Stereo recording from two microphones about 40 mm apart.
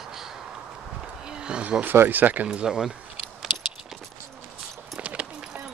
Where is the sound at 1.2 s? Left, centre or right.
Right.